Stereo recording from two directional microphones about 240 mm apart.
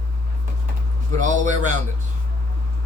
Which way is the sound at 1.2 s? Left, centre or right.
Right.